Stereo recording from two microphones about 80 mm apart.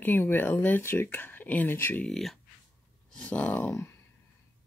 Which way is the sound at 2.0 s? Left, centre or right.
Centre.